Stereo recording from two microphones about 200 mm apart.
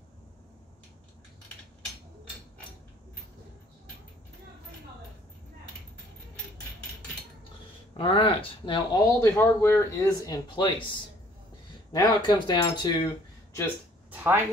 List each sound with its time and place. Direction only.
7.9 s speech: 30° left (ahead or behind)
11.9 s speech: 20° left (ahead or behind)
14.1 s a sound: 10° right (ahead or behind)